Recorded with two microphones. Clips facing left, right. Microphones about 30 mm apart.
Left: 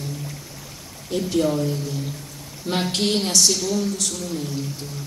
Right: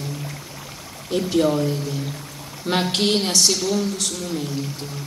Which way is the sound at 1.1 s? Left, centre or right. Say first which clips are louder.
Right 2 dB; right.